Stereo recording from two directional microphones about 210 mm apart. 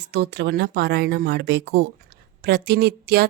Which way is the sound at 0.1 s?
55° right (ahead or behind).